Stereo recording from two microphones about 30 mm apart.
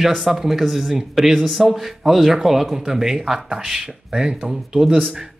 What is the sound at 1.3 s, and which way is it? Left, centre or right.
Speech, centre.